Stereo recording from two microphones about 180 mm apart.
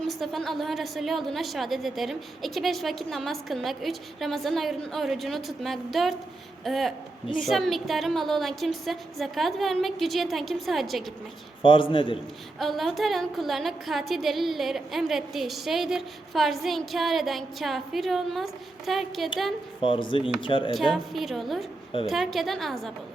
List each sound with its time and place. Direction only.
0.1 s a woman's voice: centre (ahead or behind)
11.6 s speech: 25° left (ahead or behind)
12.5 s a woman's voice: centre (ahead or behind)
19.8 s speech: 30° left (ahead or behind)
20.9 s a woman's voice: centre (ahead or behind)